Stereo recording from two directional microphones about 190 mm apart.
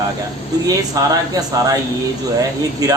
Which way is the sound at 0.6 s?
20° right (ahead or behind).